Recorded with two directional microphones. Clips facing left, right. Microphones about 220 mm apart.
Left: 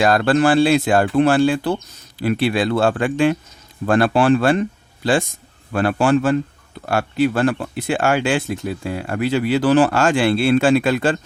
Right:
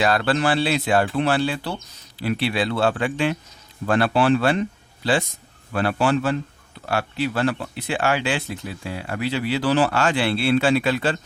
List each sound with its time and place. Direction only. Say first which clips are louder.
0.0 s speech: left 5 dB; 45° left (ahead or behind)
5.7 s speech: left 4 dB; 50° left (ahead or behind)